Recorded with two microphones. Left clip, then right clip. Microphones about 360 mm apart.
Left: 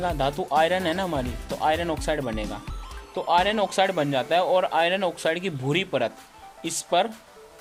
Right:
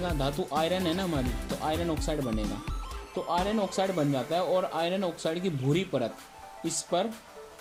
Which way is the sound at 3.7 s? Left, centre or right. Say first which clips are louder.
Left 6 dB; left.